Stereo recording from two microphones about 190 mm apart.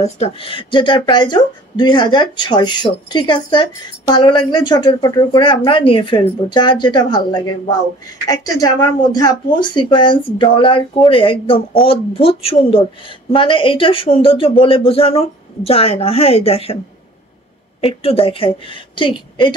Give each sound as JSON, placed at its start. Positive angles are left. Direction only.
{"t": 0.0, "sound": "speech", "side_deg": 30}
{"t": 17.7, "sound": "speech", "side_deg": 30}